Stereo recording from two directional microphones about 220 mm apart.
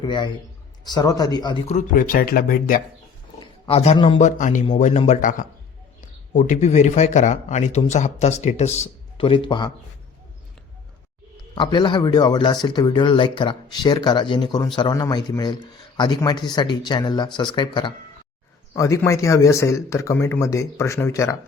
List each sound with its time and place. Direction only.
0.0 s a man's voice: 20° left (ahead or behind)
1.7 s speech: 40° left (ahead or behind)
3.4 s roaring cats: 30° left (ahead or behind)
3.9 s speech: 20° left (ahead or behind)
4.2 s speech: 35° left (ahead or behind)
11.5 s speech: 20° left (ahead or behind)